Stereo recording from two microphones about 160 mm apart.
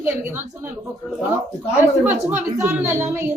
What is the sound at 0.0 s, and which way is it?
Speech, 15° right (ahead or behind).